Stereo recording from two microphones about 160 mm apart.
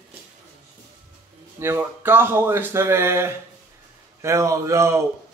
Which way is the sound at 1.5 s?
15° right (ahead or behind).